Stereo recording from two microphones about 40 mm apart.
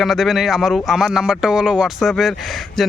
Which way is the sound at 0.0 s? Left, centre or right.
Centre.